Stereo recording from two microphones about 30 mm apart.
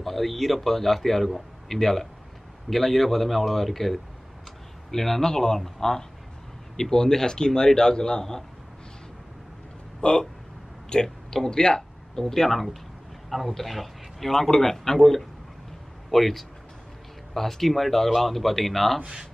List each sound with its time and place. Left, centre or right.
0.0 s a man's voice: centre; by 8.5 s left
10.0 s speech: left
10.9 s a sound: left
11.3 s speech: left
12.4 s a man's voice: centre